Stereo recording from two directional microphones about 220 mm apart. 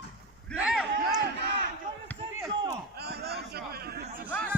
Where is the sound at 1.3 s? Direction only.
50° right (ahead or behind).